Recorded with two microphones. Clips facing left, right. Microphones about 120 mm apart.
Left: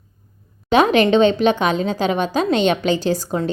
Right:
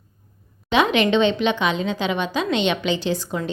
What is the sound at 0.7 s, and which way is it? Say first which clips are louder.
A woman's voice: left 4 dB; 40° left (ahead or behind).